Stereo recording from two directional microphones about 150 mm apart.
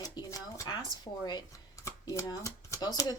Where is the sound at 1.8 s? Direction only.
20° left (ahead or behind).